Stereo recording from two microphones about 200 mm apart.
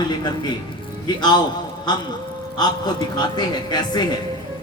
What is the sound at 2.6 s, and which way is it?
A man's voice, 20° left (ahead or behind).